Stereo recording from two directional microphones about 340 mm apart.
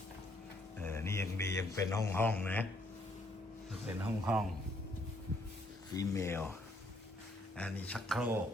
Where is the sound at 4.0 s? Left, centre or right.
Centre.